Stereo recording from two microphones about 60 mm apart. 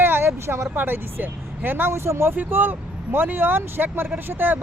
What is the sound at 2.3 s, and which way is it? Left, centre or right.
Speech, right.